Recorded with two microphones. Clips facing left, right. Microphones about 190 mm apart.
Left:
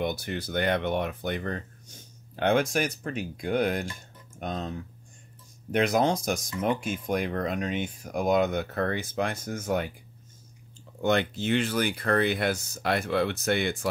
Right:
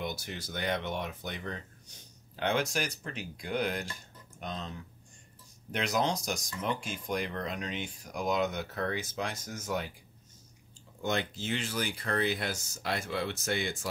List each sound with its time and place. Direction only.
0.0 s speech: 60° left (ahead or behind)
11.0 s speech: 65° left (ahead or behind)